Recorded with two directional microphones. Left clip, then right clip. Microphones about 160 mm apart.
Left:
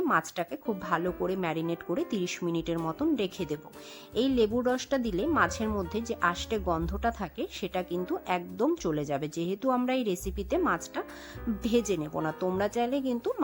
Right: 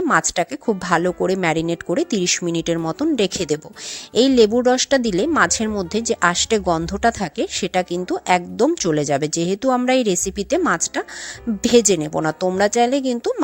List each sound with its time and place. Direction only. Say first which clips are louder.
0.0 s speech: right 10 dB; 30° right (ahead or behind)